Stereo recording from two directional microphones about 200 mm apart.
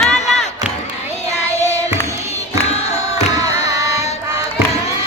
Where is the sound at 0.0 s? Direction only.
Centre (ahead or behind).